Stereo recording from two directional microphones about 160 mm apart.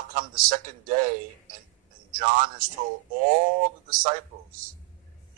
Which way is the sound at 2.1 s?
60° right (ahead or behind).